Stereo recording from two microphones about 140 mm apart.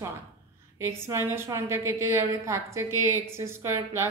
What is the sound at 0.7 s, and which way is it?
Speech, 20° right (ahead or behind).